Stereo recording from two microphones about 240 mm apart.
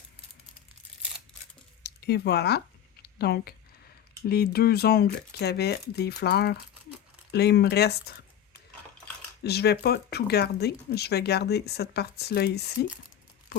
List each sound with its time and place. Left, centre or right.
1.8 s speech: left
3.0 s a sound: left
4.3 s speech: left
9.4 s speech: left